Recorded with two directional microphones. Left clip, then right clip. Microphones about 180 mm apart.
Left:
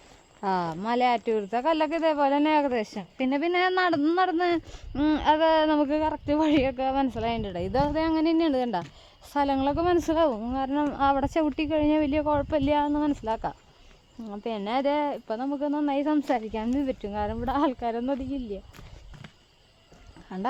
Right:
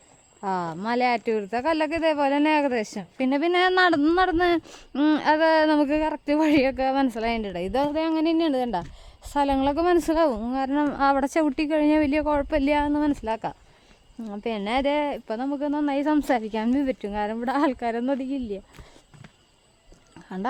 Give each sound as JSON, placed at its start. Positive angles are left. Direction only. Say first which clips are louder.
{"t": 0.4, "sound": "speech", "louder": "even", "side_deg": 0}
{"t": 0.7, "sound": "speech", "louder": "right 2 dB", "side_deg": -15}